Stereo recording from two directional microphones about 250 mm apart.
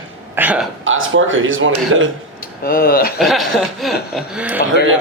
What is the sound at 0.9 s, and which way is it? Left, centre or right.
Speech, right.